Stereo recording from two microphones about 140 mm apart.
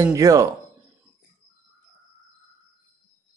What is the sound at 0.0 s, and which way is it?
Speech, 25° right (ahead or behind).